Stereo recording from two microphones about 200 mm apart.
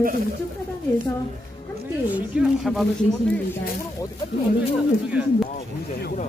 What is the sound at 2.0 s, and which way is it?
Speech, 5° right (ahead or behind).